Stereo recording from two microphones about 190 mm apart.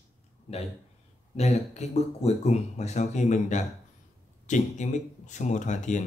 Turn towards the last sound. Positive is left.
turn(degrees=40)  # may be behind; listen again after turning